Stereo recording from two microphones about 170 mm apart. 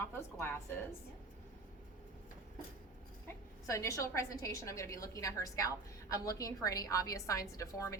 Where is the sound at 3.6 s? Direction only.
20° left (ahead or behind).